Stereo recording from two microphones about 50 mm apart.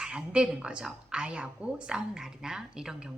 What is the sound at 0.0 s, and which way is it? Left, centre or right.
A woman's voice, centre.